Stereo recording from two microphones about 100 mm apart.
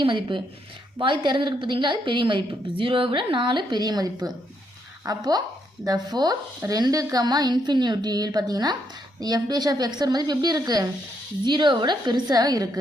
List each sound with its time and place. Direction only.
0.0 s a woman's voice: 55° right (ahead or behind); by 12.8 s 40° right (ahead or behind)